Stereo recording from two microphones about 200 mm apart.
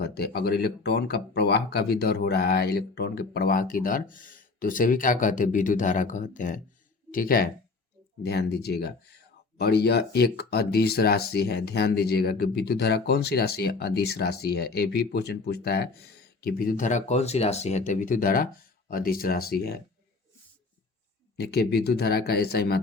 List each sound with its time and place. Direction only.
0.0 s speech: 55° left (ahead or behind)
21.3 s speech: 55° left (ahead or behind)